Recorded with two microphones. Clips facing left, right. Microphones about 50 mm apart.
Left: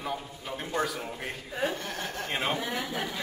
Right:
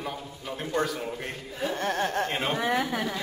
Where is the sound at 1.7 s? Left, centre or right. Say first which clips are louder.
Right 8 dB; right.